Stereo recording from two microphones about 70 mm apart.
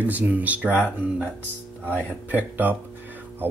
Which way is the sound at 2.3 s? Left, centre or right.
Right.